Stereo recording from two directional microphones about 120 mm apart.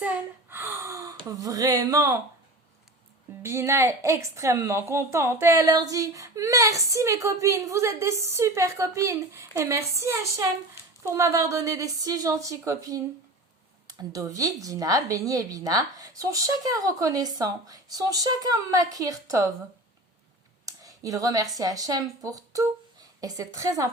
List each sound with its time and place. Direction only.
0.5 s speech: 20° right (ahead or behind)
3.4 s a woman's voice: 20° right (ahead or behind)
14.1 s a woman's voice: 30° right (ahead or behind)
20.7 s a sound: 30° right (ahead or behind)
21.5 s a woman's voice: 30° right (ahead or behind)